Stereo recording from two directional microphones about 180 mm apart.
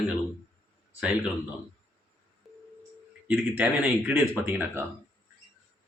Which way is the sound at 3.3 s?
10° right (ahead or behind).